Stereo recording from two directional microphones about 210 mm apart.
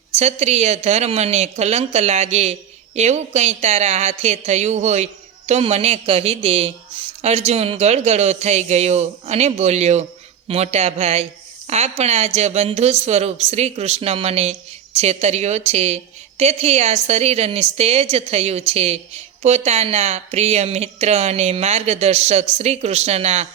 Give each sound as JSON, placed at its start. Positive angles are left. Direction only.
{"t": 0.1, "sound": "a woman's voice", "side_deg": -30}